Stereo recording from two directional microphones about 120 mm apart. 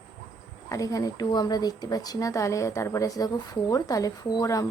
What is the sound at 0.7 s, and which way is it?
Speech, 30° left (ahead or behind).